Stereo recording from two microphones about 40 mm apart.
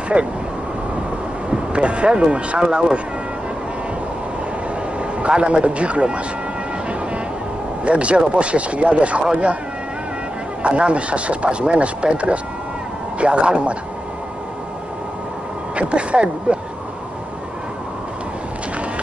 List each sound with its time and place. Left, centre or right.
0.1 s speech: right
1.5 s speech: right
4.9 s a man's voice: right
7.8 s speech: right
10.6 s speech: right
15.7 s speech: right